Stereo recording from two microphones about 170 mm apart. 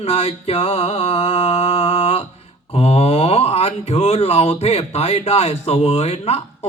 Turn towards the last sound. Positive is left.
turn(degrees=35)  # may be behind; listen again after turning